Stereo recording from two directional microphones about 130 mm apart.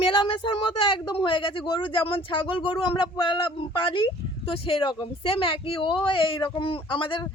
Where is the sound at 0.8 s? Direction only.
40° left (ahead or behind).